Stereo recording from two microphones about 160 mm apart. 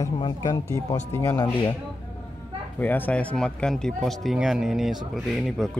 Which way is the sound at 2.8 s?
10° left (ahead or behind).